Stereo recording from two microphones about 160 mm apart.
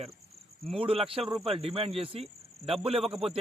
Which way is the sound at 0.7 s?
35° right (ahead or behind).